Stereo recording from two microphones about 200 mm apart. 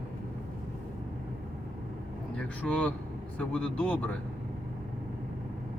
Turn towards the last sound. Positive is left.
turn(degrees=5)  # may be behind; listen again after turning